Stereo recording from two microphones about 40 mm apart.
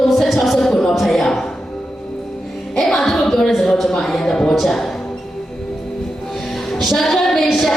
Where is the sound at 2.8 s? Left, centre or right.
Centre.